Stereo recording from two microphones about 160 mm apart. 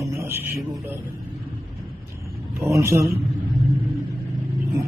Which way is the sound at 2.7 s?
15° right (ahead or behind).